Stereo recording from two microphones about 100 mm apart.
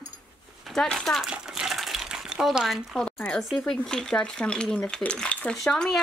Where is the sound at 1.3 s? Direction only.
5° right (ahead or behind); by 3.4 s 10° left (ahead or behind).